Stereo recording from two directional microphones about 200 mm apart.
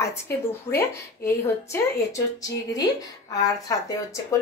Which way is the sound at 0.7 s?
15° left (ahead or behind).